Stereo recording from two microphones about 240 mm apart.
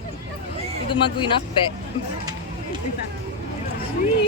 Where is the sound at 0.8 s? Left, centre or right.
Left.